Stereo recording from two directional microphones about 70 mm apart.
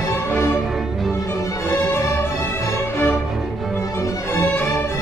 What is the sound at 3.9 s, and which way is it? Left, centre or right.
Music, left.